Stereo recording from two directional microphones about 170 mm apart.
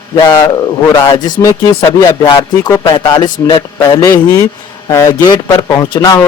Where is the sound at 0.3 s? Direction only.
25° left (ahead or behind).